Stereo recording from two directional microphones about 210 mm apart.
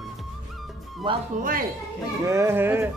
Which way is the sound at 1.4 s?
40° right (ahead or behind).